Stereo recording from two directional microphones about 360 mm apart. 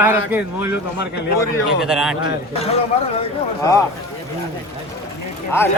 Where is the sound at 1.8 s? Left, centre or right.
Centre.